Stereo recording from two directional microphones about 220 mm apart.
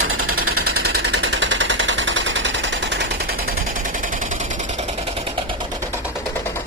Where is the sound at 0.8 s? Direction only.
50° right (ahead or behind).